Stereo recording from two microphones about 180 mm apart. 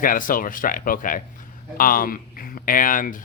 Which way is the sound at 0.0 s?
50° left (ahead or behind).